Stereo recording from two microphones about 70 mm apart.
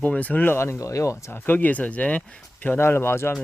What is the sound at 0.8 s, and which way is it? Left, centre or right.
Speech, left.